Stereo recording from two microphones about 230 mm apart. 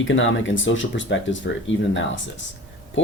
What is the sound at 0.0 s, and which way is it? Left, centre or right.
Speech, left.